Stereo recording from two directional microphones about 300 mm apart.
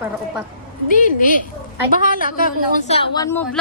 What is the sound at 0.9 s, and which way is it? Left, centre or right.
A woman's voice, left.